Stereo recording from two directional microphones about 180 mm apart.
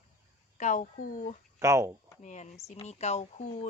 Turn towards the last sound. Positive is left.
turn(degrees=40)  # may be behind; listen again after turning